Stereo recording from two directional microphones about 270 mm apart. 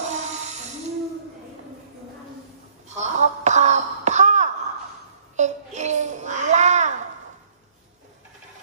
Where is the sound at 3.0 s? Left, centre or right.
Right.